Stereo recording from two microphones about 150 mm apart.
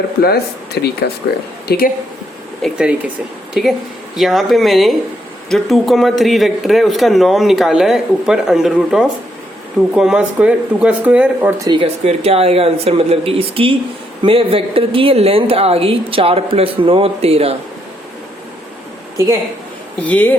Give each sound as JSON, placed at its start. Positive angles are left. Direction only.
{"t": 0.2, "sound": "speech", "side_deg": 90}
{"t": 2.6, "sound": "a woman's voice", "side_deg": 0}
{"t": 11.6, "sound": "a woman's voice", "side_deg": -30}
{"t": 12.0, "sound": "a woman's voice", "side_deg": -40}
{"t": 19.1, "sound": "a woman's voice", "side_deg": -20}
{"t": 20.0, "sound": "speech", "side_deg": 10}